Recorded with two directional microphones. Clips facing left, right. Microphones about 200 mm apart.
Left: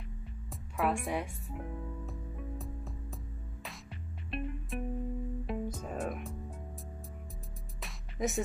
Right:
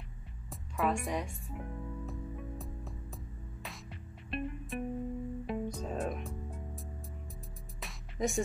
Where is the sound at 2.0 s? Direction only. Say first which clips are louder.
Right 1 dB; centre (ahead or behind).